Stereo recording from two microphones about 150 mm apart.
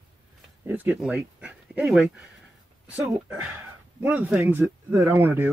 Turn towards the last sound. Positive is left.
turn(degrees=-15)  # may be behind; listen again after turning